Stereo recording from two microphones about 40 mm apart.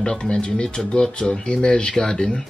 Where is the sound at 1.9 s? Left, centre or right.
Centre.